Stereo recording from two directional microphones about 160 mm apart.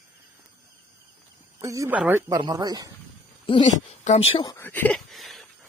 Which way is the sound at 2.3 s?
25° right (ahead or behind).